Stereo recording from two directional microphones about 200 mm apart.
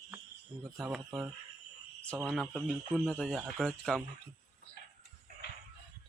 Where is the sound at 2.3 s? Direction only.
5° left (ahead or behind).